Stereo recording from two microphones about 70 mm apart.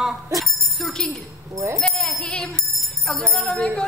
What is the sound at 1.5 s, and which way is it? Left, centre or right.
Speech, right.